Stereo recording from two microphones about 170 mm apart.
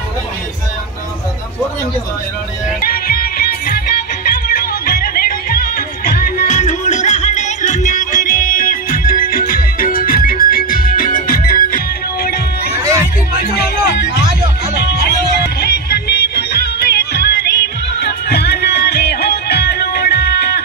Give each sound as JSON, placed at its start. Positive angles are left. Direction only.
{"t": 2.8, "sound": "music", "side_deg": 60}
{"t": 6.4, "sound": "music", "side_deg": 45}